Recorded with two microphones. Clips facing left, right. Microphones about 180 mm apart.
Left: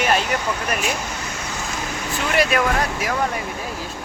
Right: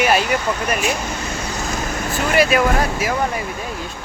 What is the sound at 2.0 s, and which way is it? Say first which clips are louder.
Vehicle: right 3 dB; 50° right (ahead or behind).